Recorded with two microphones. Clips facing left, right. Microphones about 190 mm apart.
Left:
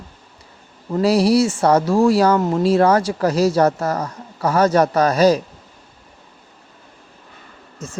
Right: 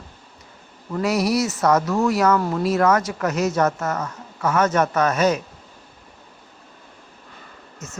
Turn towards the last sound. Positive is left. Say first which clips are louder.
# left 5 dB
turn(degrees=30)  # may be behind; listen again after turning